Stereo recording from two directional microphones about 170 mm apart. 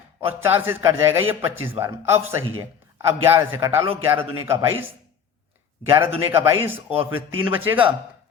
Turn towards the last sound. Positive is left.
turn(degrees=-10)  # may be behind; listen again after turning